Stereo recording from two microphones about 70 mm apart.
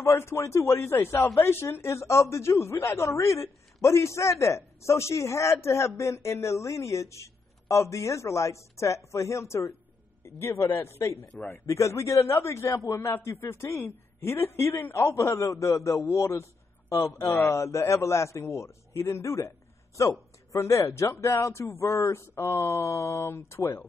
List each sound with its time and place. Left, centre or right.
0.0 s a man's voice: left